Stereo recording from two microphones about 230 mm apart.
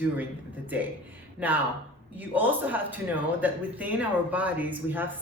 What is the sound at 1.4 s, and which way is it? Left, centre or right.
A woman's voice, centre.